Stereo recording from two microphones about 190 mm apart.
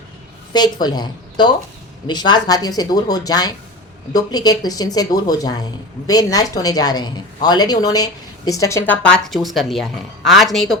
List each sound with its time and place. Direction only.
0.5 s a woman's voice: 20° left (ahead or behind); by 10.8 s centre (ahead or behind)